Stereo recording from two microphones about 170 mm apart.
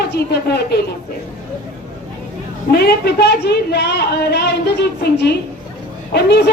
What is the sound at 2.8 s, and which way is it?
A woman's voice, 75° left (ahead or behind).